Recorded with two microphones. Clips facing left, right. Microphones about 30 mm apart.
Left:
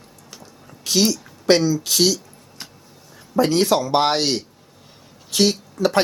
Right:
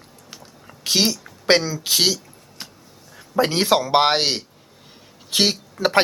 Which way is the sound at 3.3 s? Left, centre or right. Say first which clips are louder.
Left 1 dB; right.